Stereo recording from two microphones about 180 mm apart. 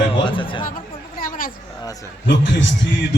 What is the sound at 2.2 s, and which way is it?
Speech, 90° left.